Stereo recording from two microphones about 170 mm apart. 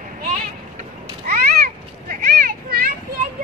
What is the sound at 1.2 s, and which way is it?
Children playing, 60° right (ahead or behind).